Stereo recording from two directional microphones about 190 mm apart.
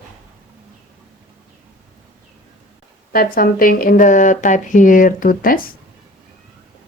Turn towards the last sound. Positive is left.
turn(degrees=45)  # may be behind; listen again after turning